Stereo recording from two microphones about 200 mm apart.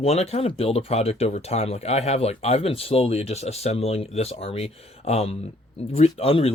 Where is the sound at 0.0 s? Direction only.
30° left (ahead or behind).